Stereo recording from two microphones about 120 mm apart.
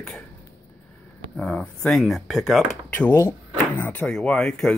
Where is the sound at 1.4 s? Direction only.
5° left (ahead or behind).